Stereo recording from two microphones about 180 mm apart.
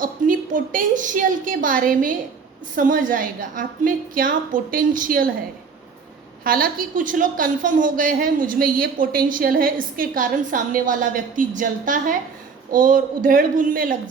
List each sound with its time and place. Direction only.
0.0 s a woman's voice: 50° right (ahead or behind)
6.4 s a woman's voice: 55° right (ahead or behind)